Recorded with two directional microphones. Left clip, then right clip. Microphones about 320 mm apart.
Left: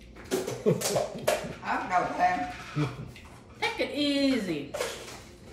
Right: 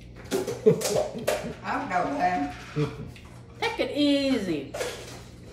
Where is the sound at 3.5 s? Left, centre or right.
Centre.